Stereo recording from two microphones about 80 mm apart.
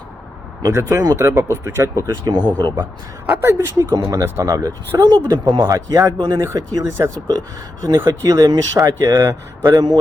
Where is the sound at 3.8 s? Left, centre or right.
Right.